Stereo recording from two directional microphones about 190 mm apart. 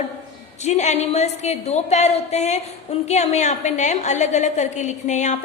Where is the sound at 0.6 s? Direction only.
35° left (ahead or behind).